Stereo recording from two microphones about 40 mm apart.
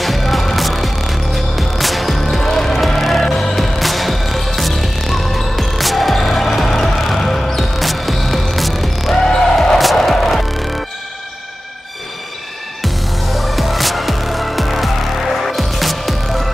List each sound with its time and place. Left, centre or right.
0.0 s music: centre
9.1 s music: centre
9.8 s music: centre
12.8 s music: centre